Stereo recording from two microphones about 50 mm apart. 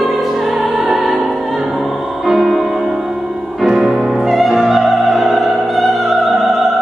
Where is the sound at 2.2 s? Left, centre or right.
Centre.